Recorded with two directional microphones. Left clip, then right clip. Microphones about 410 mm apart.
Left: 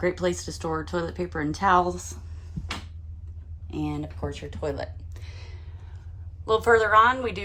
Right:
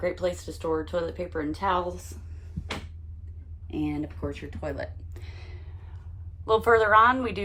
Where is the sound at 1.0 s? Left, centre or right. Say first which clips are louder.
Left 1 dB; centre.